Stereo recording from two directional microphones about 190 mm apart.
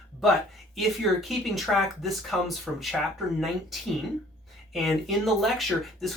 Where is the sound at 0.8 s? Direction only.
Centre (ahead or behind).